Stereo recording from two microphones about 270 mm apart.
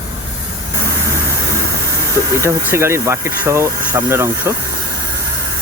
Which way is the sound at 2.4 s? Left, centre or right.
Centre.